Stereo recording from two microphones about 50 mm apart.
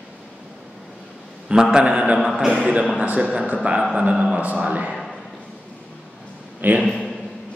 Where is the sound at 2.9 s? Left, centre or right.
Right.